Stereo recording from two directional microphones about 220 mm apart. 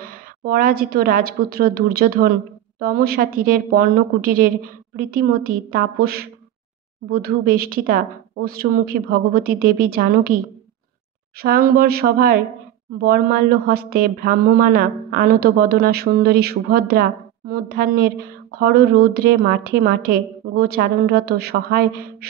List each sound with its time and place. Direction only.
0.0 s a woman's voice: 40° right (ahead or behind)
11.4 s a woman's voice: 40° right (ahead or behind)